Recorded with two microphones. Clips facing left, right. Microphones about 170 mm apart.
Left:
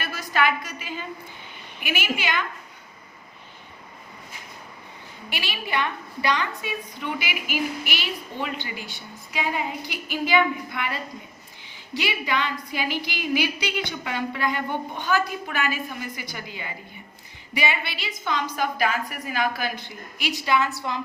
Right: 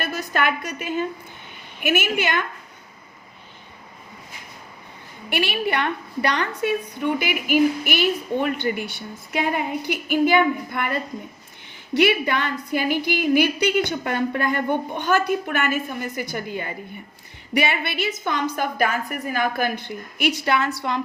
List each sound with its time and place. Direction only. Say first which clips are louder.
0.0 s a woman's voice: right 1 dB; 50° right (ahead or behind)
5.3 s a woman's voice: right 7 dB; 60° right (ahead or behind)